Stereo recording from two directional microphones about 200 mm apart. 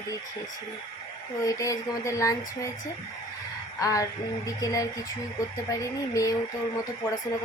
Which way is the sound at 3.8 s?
15° left (ahead or behind).